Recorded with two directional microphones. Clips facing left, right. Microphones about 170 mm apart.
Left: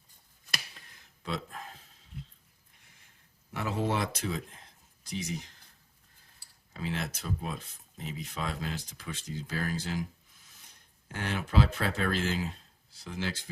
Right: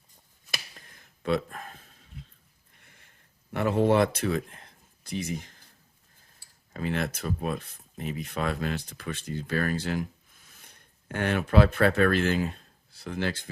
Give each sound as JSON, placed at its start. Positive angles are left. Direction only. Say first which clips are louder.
{"t": 0.7, "sound": "a sound", "louder": "right 3 dB", "side_deg": -50}
{"t": 3.5, "sound": "speech", "louder": "right 8 dB", "side_deg": -60}
{"t": 6.7, "sound": "speech", "louder": "right 6 dB", "side_deg": -55}